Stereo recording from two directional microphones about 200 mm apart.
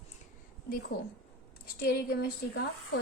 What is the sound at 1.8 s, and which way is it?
Speech, 50° left (ahead or behind).